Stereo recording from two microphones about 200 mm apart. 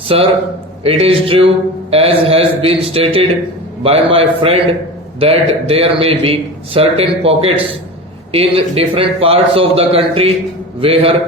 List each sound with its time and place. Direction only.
0.1 s a man's voice: 30° right (ahead or behind)